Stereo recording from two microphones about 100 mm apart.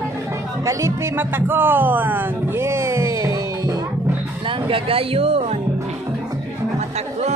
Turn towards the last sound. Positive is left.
turn(degrees=-75)  # may be behind; listen again after turning